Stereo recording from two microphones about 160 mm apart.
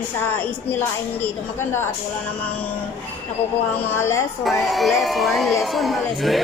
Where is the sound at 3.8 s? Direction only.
15° left (ahead or behind).